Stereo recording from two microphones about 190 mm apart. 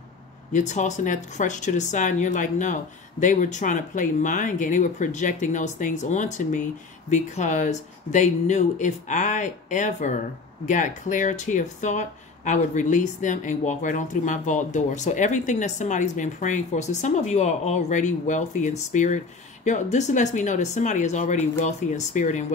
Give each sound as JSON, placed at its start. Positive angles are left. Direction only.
{"t": 0.5, "sound": "speech", "side_deg": 40}